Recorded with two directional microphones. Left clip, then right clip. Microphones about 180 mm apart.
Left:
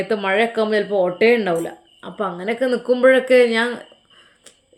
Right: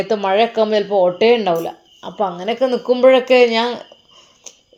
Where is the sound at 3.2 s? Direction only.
35° left (ahead or behind).